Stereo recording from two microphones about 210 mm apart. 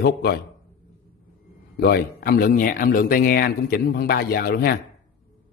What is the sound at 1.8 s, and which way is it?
Speech, 45° left (ahead or behind).